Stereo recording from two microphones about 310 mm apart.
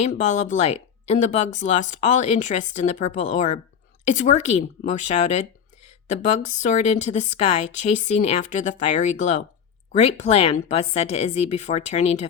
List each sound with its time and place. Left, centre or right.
0.0 s speech: left